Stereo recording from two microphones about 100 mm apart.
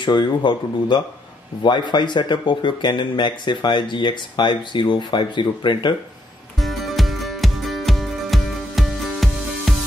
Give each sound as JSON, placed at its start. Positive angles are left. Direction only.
{"t": 0.0, "sound": "speech", "side_deg": 55}
{"t": 6.6, "sound": "music", "side_deg": 0}